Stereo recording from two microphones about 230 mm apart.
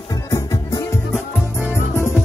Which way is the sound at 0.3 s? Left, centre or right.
Centre.